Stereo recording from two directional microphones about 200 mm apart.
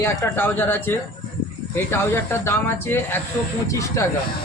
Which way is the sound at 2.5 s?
10° left (ahead or behind).